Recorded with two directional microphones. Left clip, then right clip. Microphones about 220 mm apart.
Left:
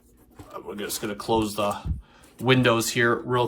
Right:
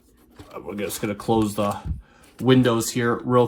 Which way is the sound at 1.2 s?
35° right (ahead or behind).